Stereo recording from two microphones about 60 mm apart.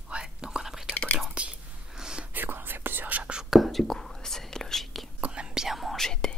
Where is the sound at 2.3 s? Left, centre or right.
Right.